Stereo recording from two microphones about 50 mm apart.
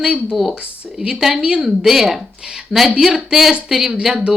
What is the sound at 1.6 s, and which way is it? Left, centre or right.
A woman's voice, centre.